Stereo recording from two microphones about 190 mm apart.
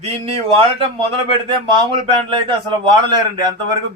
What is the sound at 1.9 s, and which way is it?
Speech, 25° right (ahead or behind).